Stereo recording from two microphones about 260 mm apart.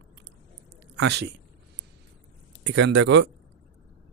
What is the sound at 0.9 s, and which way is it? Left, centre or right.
Speech, right.